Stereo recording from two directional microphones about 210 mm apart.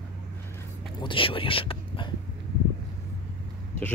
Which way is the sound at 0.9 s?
25° left (ahead or behind).